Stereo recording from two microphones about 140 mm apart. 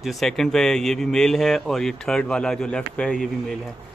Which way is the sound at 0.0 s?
Centre (ahead or behind).